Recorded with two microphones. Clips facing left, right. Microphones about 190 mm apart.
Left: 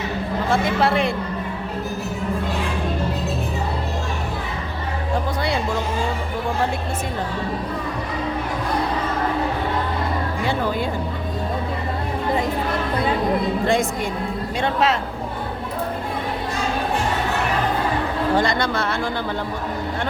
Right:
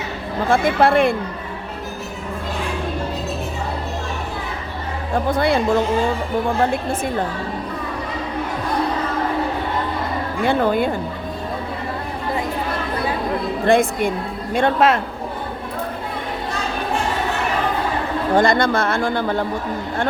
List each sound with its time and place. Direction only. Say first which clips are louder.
0.5 s speech: right 5 dB; 55° right (ahead or behind)
5.3 s speech: right 6 dB; 55° right (ahead or behind)
10.4 s speech: right 7 dB; 55° right (ahead or behind)
13.7 s speech: right 5 dB; 55° right (ahead or behind)
18.3 s speech: right 8 dB; 50° right (ahead or behind)